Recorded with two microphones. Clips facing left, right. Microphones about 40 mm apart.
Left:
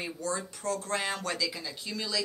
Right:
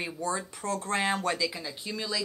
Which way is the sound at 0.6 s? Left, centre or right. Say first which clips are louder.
Right 3 dB; right.